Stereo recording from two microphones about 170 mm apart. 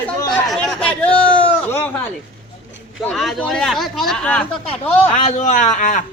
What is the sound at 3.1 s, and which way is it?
Speech, centre (ahead or behind).